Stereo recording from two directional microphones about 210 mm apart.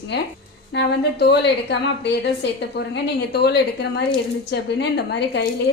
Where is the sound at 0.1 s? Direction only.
55° left (ahead or behind).